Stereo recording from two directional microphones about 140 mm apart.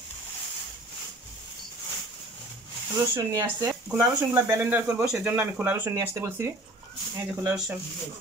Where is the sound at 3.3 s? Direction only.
25° right (ahead or behind).